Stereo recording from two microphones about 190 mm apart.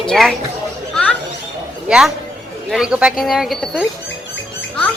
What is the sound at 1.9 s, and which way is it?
Speech, 5° right (ahead or behind).